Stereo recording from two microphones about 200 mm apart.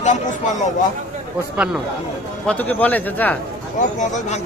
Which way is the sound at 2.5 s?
10° left (ahead or behind).